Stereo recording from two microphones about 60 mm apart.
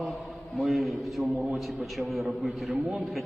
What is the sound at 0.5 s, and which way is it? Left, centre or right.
A man's voice, centre.